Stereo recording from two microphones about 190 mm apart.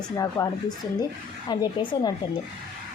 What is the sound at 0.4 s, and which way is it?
A woman's voice, 15° left (ahead or behind).